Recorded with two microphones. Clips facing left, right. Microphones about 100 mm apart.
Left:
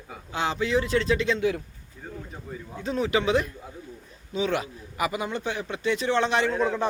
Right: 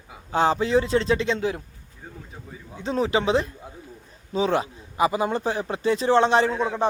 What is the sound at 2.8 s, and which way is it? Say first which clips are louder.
Speech: right 2 dB; 30° right (ahead or behind).